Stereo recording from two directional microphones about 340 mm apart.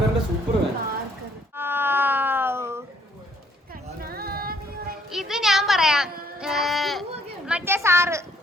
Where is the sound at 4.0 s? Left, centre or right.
Right.